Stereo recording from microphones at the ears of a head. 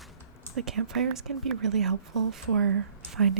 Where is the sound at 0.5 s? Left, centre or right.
Right.